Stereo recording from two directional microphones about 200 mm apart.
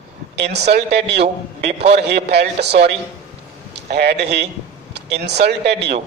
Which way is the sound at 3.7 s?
55° right (ahead or behind).